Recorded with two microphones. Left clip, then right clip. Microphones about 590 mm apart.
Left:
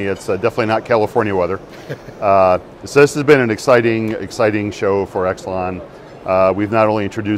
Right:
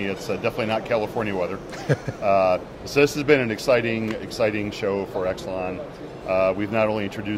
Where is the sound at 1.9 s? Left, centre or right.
Right.